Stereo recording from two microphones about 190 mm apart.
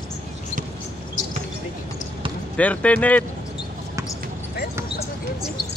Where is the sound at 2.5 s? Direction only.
5° left (ahead or behind).